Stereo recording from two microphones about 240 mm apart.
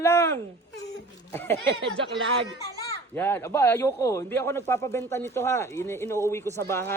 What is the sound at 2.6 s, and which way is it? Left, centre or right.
A child's voice, centre.